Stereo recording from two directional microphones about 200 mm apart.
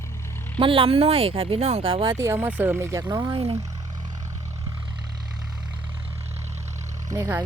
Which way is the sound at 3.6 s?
15° right (ahead or behind).